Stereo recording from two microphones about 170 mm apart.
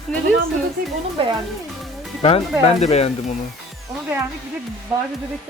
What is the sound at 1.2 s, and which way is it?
Speech, 30° right (ahead or behind).